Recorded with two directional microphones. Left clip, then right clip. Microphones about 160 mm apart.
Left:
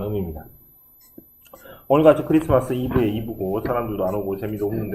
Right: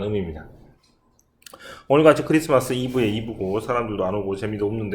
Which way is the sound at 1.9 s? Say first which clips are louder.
Even; 55° right (ahead or behind).